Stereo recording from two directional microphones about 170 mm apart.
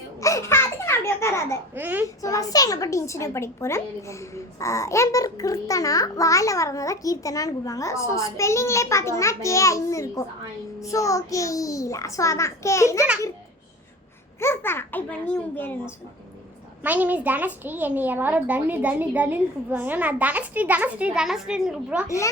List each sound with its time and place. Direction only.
0.2 s baby laughter: 20° left (ahead or behind)
1.7 s a child's voice: 10° right (ahead or behind)
2.2 s a woman's voice: 20° left (ahead or behind)
14.3 s a woman's voice: 15° left (ahead or behind)
16.8 s a child's voice: 10° right (ahead or behind)